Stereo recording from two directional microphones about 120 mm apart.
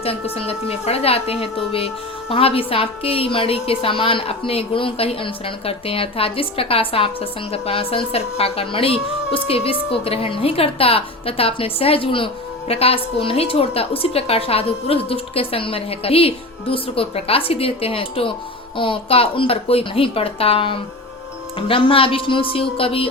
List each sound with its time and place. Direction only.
0.3 s a woman's voice: 55° left (ahead or behind)